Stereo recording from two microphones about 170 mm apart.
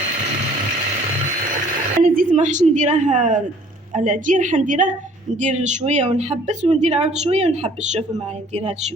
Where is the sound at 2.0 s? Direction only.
55° right (ahead or behind); by 7.5 s 40° right (ahead or behind).